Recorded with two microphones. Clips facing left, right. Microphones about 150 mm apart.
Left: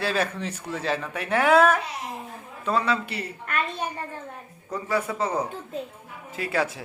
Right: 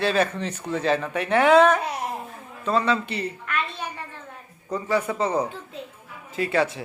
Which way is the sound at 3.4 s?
45° left (ahead or behind).